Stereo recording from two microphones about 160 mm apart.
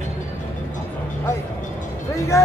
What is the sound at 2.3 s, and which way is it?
Speech, 20° left (ahead or behind).